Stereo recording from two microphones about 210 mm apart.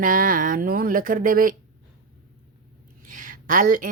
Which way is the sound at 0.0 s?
40° right (ahead or behind).